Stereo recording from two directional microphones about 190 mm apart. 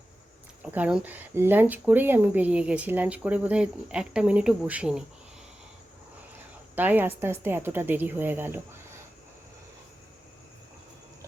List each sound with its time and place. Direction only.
0.6 s speech: 5° right (ahead or behind)
6.7 s speech: 10° right (ahead or behind)